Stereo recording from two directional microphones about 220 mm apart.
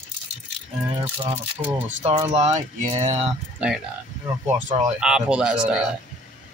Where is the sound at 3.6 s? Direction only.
5° right (ahead or behind).